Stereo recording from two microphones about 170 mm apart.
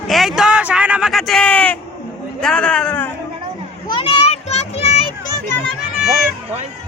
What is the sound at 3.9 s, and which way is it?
Children playing, 35° left (ahead or behind).